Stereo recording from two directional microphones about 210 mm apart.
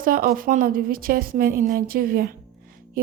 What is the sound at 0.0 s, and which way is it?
A woman's voice, 45° right (ahead or behind).